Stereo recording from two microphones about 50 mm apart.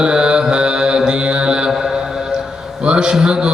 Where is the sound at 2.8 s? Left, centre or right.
Centre.